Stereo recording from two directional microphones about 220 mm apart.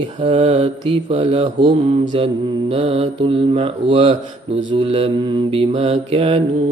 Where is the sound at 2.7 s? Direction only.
25° right (ahead or behind).